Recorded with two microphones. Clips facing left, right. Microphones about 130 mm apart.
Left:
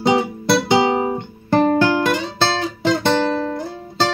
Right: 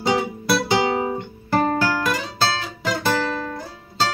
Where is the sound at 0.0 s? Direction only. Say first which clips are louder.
Left 4 dB; 30° left (ahead or behind).